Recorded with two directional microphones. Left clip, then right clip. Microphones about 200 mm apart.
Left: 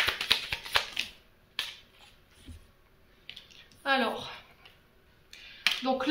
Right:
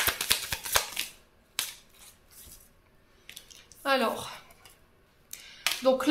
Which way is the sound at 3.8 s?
60° right (ahead or behind).